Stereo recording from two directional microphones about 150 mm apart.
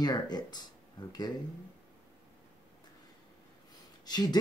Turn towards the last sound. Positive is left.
turn(degrees=25)  # may be behind; listen again after turning